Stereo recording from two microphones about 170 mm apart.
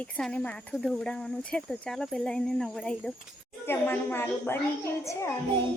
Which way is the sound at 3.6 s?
15° left (ahead or behind).